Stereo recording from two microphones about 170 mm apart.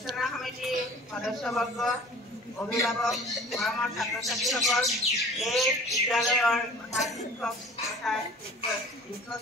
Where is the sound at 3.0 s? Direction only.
Centre (ahead or behind).